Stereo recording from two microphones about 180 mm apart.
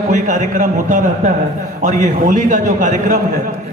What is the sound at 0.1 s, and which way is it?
A man's voice, 45° right (ahead or behind).